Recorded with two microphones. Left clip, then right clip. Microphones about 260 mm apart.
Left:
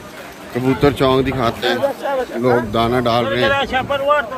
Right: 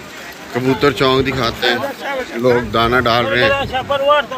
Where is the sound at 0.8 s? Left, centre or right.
Centre.